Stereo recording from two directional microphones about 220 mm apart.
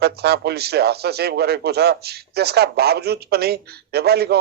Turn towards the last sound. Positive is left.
turn(degrees=-45)  # may be behind; listen again after turning